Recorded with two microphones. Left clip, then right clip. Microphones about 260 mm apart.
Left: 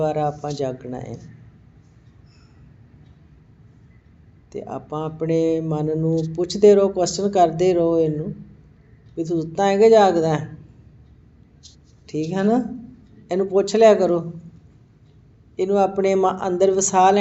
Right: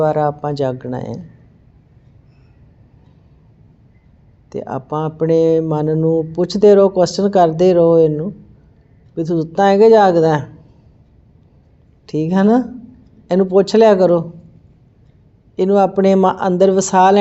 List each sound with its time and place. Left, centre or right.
0.0 s speech: right
4.4 s speech: right
12.0 s speech: right
15.5 s speech: right